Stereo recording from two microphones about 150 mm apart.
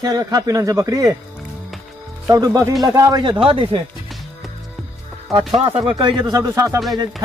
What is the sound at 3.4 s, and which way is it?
Speech, 35° right (ahead or behind).